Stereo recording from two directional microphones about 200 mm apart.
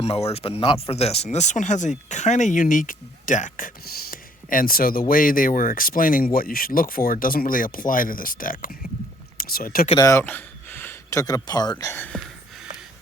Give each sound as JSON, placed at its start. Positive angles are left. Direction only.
{"t": 0.0, "sound": "speech", "side_deg": 30}
{"t": 9.9, "sound": "a sound", "side_deg": 15}
{"t": 11.4, "sound": "speech", "side_deg": 20}